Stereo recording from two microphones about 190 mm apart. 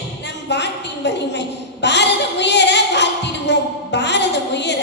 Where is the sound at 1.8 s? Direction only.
65° left (ahead or behind).